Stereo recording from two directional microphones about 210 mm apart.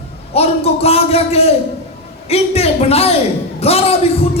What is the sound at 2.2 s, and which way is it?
Speech, 30° left (ahead or behind).